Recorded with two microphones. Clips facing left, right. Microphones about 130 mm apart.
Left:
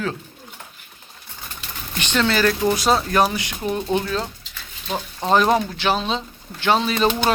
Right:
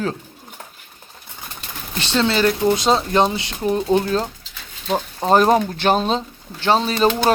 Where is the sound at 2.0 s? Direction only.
30° right (ahead or behind).